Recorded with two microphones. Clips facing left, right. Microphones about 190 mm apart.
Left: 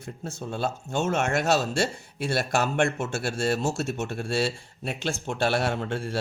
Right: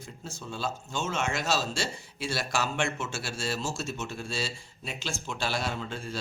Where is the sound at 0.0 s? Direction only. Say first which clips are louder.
Left 6 dB; 60° left (ahead or behind).